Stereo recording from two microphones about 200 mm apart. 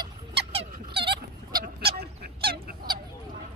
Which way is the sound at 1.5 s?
50° right (ahead or behind).